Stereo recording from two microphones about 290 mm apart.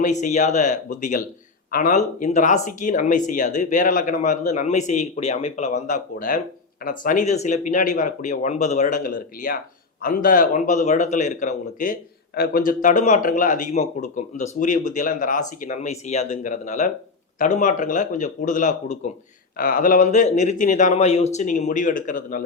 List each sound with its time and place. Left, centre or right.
0.0 s a man's voice: left